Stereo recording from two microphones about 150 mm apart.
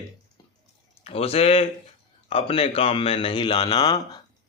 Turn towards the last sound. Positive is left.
turn(degrees=25)  # may be behind; listen again after turning